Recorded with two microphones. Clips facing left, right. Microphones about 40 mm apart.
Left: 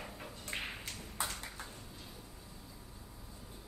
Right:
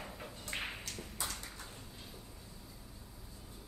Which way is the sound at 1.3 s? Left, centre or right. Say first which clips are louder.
Left 1 dB; centre.